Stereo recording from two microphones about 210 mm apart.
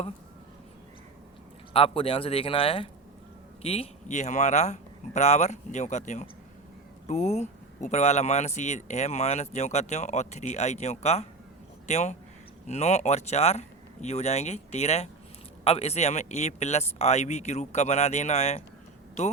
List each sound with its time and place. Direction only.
1.7 s speech: 25° left (ahead or behind)